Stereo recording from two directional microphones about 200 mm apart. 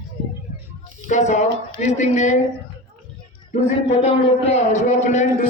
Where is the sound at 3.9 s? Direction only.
30° left (ahead or behind).